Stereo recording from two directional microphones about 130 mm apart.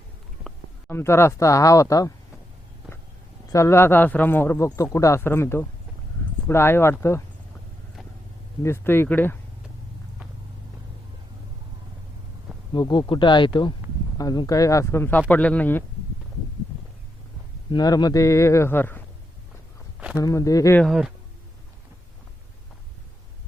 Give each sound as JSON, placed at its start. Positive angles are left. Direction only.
{"t": 0.9, "sound": "a man's voice", "side_deg": 20}
{"t": 3.5, "sound": "a man's voice", "side_deg": 20}
{"t": 8.6, "sound": "speech", "side_deg": 15}
{"t": 12.7, "sound": "a man's voice", "side_deg": 35}
{"t": 17.7, "sound": "a man's voice", "side_deg": 30}
{"t": 20.1, "sound": "a man's voice", "side_deg": 25}
{"t": 20.8, "sound": "speech", "side_deg": -5}